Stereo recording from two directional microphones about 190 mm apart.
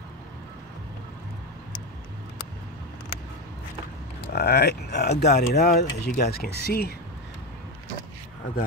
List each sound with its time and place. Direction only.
4.3 s speech: 60° left (ahead or behind)